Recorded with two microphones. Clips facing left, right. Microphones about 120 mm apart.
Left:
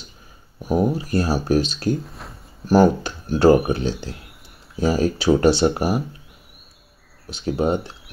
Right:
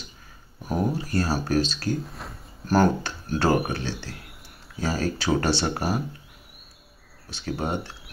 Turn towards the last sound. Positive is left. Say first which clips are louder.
# left 8 dB
turn(degrees=15)  # may be behind; listen again after turning